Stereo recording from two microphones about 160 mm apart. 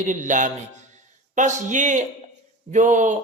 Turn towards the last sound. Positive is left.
turn(degrees=-50)  # may be behind; listen again after turning